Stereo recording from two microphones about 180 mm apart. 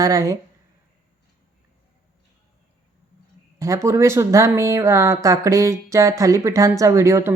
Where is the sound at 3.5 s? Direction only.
15° right (ahead or behind).